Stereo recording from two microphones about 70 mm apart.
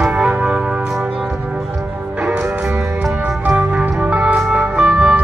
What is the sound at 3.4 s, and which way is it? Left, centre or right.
Music, centre.